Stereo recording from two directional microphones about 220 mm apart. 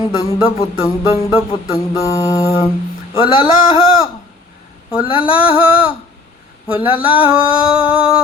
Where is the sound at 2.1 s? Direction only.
15° left (ahead or behind).